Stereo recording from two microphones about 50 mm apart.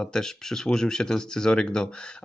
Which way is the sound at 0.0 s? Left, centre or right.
Centre.